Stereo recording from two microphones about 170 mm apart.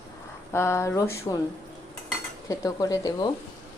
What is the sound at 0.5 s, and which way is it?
Speech, 15° left (ahead or behind).